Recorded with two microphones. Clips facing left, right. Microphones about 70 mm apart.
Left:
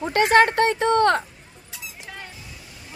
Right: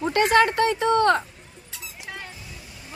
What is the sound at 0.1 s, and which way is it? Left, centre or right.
Speech, left.